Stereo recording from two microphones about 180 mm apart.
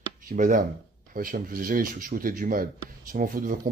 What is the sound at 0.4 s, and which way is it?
Speech, 45° right (ahead or behind).